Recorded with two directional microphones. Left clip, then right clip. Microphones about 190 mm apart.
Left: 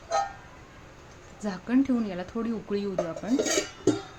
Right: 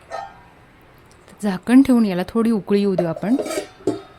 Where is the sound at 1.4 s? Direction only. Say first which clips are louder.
Right 11 dB; 50° right (ahead or behind).